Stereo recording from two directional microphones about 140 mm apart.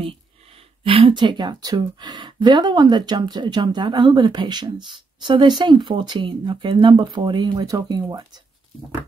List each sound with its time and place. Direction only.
0.8 s speech: 40° right (ahead or behind)